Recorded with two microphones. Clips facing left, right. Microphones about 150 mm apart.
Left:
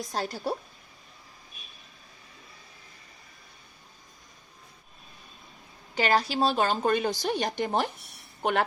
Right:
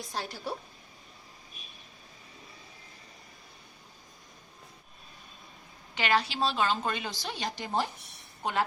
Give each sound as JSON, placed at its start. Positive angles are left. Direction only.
{"t": 0.0, "sound": "a woman's voice", "side_deg": 40}
{"t": 5.9, "sound": "a woman's voice", "side_deg": 40}